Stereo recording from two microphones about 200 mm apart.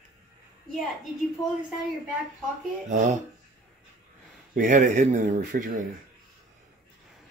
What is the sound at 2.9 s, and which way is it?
Speech, 40° right (ahead or behind).